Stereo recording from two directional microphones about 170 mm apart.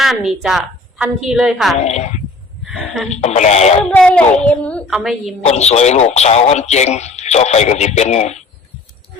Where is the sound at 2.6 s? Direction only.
Centre (ahead or behind).